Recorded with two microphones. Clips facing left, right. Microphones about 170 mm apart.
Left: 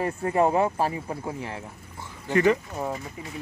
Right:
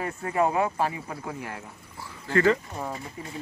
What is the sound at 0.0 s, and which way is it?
Speech, 30° left (ahead or behind).